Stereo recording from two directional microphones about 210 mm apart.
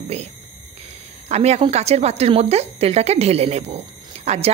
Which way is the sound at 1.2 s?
30° right (ahead or behind).